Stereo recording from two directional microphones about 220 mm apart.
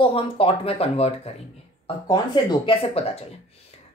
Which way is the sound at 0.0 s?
25° left (ahead or behind).